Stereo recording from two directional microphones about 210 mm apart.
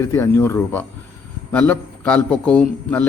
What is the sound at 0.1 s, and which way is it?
A man's voice, 10° left (ahead or behind).